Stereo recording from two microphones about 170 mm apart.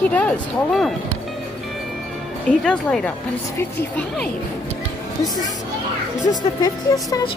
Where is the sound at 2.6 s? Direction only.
5° left (ahead or behind).